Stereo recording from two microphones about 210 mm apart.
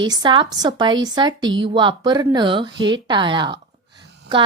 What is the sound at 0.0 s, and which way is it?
Speech, 20° right (ahead or behind).